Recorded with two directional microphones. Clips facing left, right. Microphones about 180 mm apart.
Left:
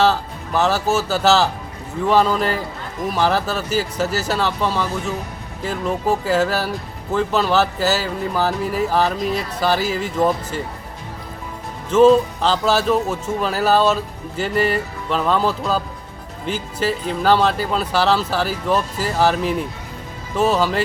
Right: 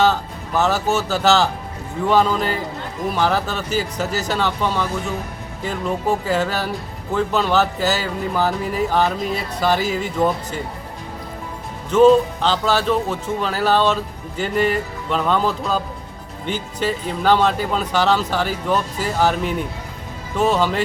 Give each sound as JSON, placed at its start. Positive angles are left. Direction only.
{"t": 0.0, "sound": "speech", "side_deg": 0}
{"t": 11.9, "sound": "speech", "side_deg": 0}